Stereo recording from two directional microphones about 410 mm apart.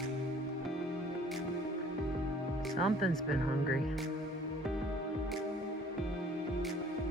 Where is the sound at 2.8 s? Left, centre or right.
Centre.